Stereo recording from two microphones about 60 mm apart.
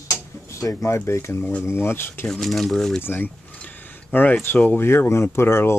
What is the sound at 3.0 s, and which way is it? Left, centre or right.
Speech, left.